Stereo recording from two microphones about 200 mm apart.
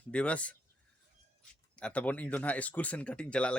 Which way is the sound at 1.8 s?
5° left (ahead or behind).